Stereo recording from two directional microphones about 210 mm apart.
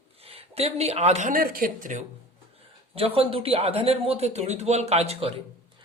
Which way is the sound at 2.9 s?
25° right (ahead or behind).